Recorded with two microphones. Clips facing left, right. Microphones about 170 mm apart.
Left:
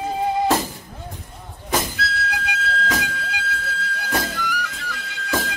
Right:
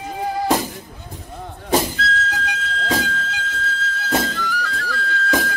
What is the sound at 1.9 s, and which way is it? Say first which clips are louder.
Whistle: right 3 dB; 10° left (ahead or behind).